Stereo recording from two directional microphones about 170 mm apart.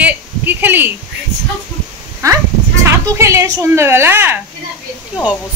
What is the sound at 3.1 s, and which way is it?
A woman's voice, 15° right (ahead or behind).